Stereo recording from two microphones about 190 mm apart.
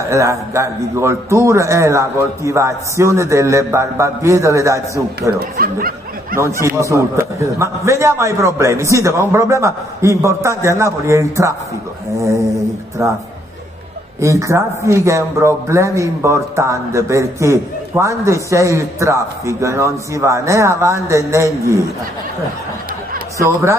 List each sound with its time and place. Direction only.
0.1 s a man's voice: 15° right (ahead or behind)
5.6 s speech: 50° right (ahead or behind)
6.8 s a man's voice: 15° right (ahead or behind)
13.0 s a man's voice: 15° right (ahead or behind)
14.2 s a man's voice: 15° right (ahead or behind)
23.3 s a man's voice: 15° right (ahead or behind)